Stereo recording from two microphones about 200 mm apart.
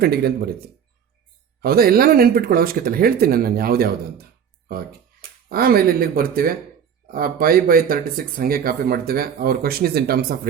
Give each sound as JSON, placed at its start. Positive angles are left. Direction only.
{"t": 0.0, "sound": "speech", "side_deg": -50}
{"t": 1.6, "sound": "speech", "side_deg": -50}